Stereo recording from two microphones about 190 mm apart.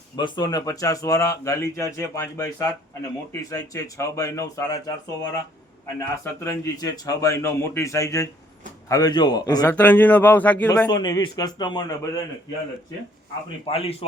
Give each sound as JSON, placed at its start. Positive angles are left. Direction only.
{"t": 0.2, "sound": "speech", "side_deg": 25}
{"t": 6.2, "sound": "a man's voice", "side_deg": 15}
{"t": 9.6, "sound": "speech", "side_deg": 5}
{"t": 10.8, "sound": "a man's voice", "side_deg": 20}
{"t": 13.7, "sound": "a man's voice", "side_deg": 30}